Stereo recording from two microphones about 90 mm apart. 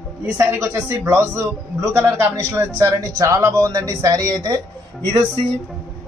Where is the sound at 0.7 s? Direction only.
25° right (ahead or behind); by 4.6 s 45° right (ahead or behind).